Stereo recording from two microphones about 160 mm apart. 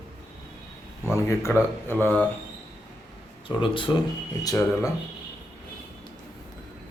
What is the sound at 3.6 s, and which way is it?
Speech, 30° left (ahead or behind).